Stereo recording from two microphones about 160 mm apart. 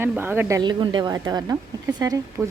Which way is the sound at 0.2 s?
15° right (ahead or behind).